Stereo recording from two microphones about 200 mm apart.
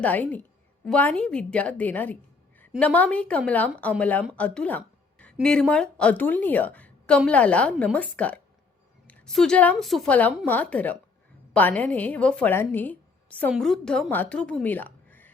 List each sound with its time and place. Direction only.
0.0 s a woman's voice: 10° left (ahead or behind)